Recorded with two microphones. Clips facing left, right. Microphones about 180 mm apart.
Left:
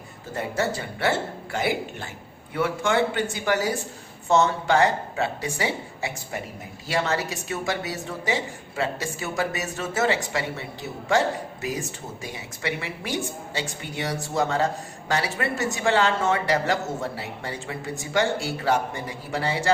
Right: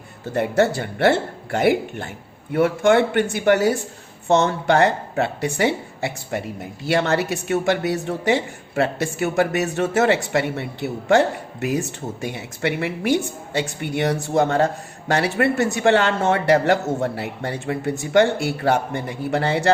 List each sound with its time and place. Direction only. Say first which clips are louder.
0.3 s speech: right 8 dB; 65° right (ahead or behind)
6.8 s speech: right 6 dB; 65° right (ahead or behind)
12.2 s speech: right 7 dB; 60° right (ahead or behind)